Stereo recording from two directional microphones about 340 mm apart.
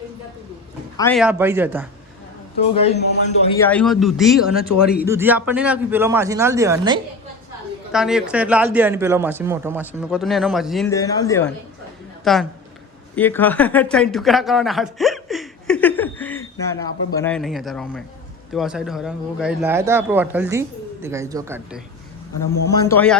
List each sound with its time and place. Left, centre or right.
0.9 s speech: centre
2.7 s a man's voice: centre
3.6 s a man's voice: centre
22.8 s a man's voice: centre